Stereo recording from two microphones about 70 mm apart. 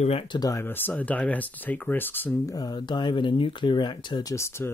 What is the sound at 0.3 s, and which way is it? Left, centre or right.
Speech, left.